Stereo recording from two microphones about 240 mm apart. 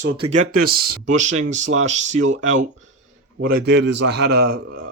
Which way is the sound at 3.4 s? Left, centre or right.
Right.